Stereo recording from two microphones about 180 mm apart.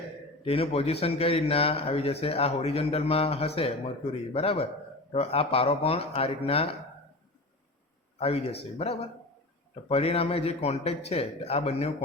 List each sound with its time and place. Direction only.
0.4 s speech: 30° left (ahead or behind)
8.2 s speech: 35° left (ahead or behind)